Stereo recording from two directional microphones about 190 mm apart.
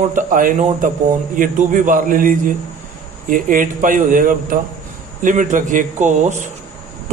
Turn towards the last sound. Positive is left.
turn(degrees=-40)  # may be behind; listen again after turning